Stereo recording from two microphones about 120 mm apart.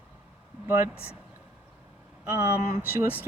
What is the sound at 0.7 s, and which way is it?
Speech, 15° right (ahead or behind).